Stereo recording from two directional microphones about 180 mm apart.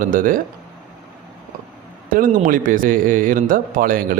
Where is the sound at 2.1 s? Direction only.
50° right (ahead or behind).